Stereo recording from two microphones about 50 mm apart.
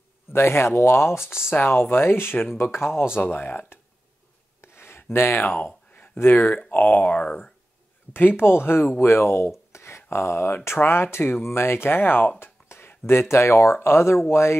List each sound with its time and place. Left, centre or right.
0.3 s speech: left
1.5 s speech: left
4.6 s a sound: left
5.4 s speech: left
6.1 s speech: left
6.7 s speech: left
8.1 s speech: left
9.7 s a sound: left
10.0 s speech: left